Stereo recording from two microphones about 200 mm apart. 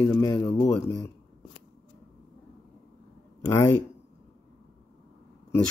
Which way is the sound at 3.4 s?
10° left (ahead or behind).